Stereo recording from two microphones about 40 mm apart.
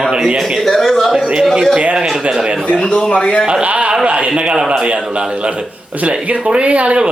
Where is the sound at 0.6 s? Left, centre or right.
Centre.